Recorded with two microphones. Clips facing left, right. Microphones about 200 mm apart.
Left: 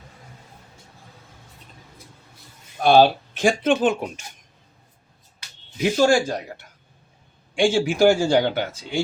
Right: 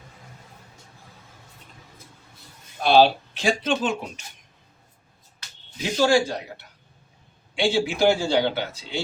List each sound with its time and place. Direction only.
2.8 s a man's voice: 50° left (ahead or behind)
6.0 s a man's voice: 50° left (ahead or behind)